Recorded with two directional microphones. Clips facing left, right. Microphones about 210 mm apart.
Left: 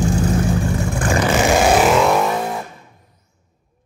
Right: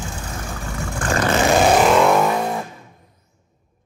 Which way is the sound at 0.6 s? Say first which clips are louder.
Left 6 dB; 20° left (ahead or behind).